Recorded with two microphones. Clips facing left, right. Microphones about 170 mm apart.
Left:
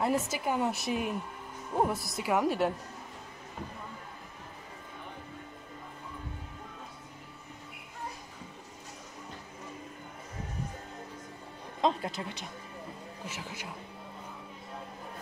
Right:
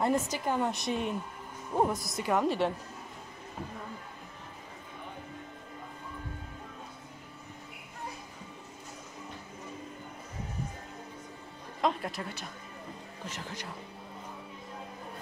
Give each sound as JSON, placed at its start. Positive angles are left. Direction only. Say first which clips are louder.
{"t": 0.0, "sound": "a woman's voice", "louder": "right 1 dB", "side_deg": 5}
{"t": 11.8, "sound": "speech", "louder": "left 1 dB", "side_deg": 20}
{"t": 13.2, "sound": "speech", "louder": "right 2 dB", "side_deg": 5}